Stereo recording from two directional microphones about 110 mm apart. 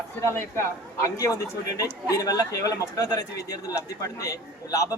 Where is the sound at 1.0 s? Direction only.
30° left (ahead or behind).